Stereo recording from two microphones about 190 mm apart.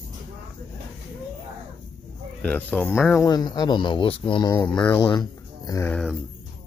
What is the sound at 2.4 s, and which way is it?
Speech, 10° left (ahead or behind).